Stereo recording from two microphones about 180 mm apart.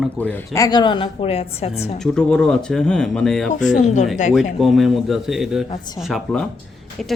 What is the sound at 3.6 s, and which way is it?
Speech, 40° left (ahead or behind).